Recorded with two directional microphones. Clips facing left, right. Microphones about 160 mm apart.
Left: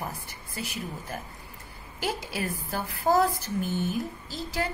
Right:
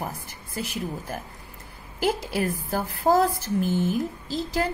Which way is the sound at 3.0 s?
30° right (ahead or behind).